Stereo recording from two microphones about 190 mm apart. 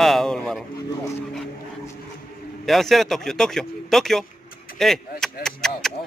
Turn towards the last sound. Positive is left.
turn(degrees=5)  # may be behind; listen again after turning